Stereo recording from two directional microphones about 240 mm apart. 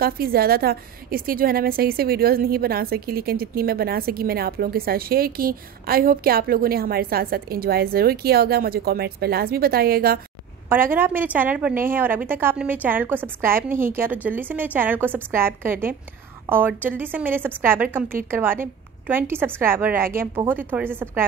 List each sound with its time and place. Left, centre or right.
0.0 s a woman's voice: right
10.7 s a woman's voice: centre